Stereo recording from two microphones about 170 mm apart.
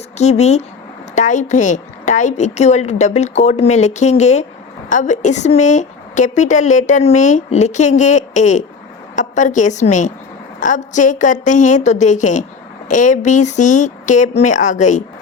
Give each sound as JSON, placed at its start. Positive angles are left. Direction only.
{"t": 0.2, "sound": "speech", "side_deg": 40}